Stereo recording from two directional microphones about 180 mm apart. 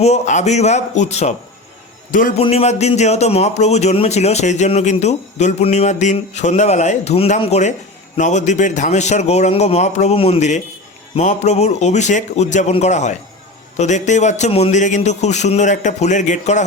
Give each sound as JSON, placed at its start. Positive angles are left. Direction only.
{"t": 0.0, "sound": "speech", "side_deg": 40}
{"t": 2.4, "sound": "speech", "side_deg": 35}